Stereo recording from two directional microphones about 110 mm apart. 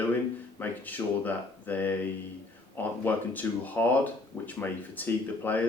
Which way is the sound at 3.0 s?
15° left (ahead or behind).